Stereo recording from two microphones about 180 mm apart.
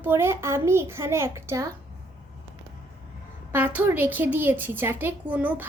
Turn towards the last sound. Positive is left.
turn(degrees=-10)  # may be behind; listen again after turning